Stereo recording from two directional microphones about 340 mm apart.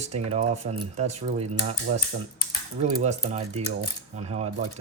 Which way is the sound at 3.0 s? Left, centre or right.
Centre.